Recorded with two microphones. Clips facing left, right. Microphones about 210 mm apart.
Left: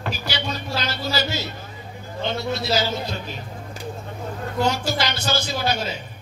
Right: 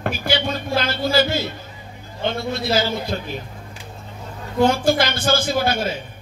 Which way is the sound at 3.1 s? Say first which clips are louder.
Right 5 dB; 55° right (ahead or behind).